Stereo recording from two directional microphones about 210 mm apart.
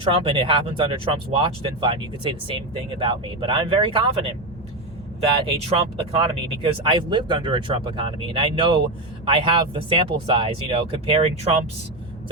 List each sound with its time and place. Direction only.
0.0 s speech: 25° right (ahead or behind)
5.5 s speech: 30° right (ahead or behind)